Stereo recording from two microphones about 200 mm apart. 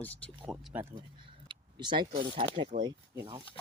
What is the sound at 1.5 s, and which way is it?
Speech, 25° right (ahead or behind).